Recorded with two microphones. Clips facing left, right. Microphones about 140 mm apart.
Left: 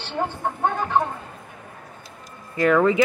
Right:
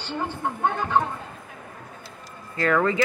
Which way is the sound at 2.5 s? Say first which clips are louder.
Left 4 dB; 15° left (ahead or behind).